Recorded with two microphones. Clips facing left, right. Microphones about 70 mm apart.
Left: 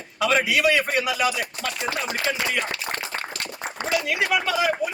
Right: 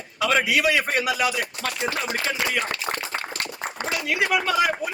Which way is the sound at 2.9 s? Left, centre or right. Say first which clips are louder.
Right 2 dB; right.